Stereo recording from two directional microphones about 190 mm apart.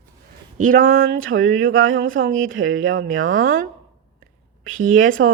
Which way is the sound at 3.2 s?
45° right (ahead or behind).